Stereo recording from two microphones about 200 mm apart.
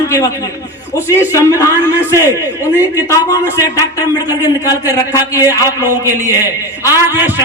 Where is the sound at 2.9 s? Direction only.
15° left (ahead or behind).